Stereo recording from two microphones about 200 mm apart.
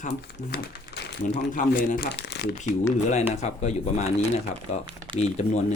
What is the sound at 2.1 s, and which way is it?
Shuffling cards, 60° left (ahead or behind).